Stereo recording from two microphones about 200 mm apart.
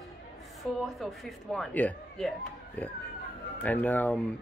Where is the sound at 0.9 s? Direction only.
Centre (ahead or behind).